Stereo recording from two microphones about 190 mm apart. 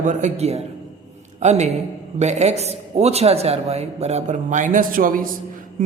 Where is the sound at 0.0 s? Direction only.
40° right (ahead or behind).